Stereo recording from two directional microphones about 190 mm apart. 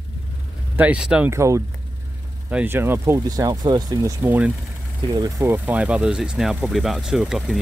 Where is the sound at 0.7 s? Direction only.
5° right (ahead or behind).